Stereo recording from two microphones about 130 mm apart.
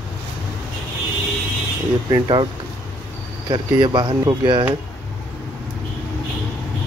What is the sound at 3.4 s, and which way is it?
Speech, 35° right (ahead or behind).